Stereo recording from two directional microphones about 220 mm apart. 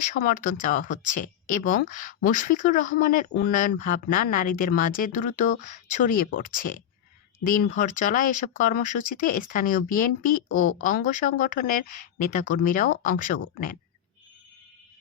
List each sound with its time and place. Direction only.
0.2 s speech: 40° left (ahead or behind)